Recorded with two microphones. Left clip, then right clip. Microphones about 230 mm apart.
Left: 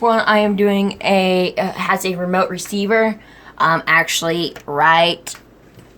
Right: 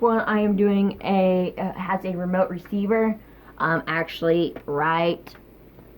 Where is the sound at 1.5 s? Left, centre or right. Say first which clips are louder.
Left 9 dB; left; by 5.3 s centre.